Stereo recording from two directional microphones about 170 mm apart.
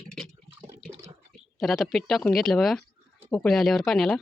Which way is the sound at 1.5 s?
Centre (ahead or behind).